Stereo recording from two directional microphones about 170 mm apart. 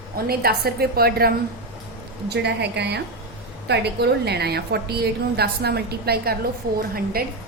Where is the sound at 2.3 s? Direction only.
80° right.